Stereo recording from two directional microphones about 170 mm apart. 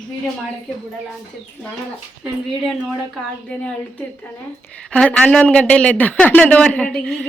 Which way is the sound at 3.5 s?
10° left (ahead or behind).